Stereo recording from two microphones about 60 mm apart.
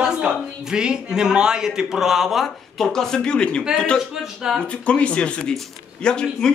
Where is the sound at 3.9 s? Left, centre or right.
Centre.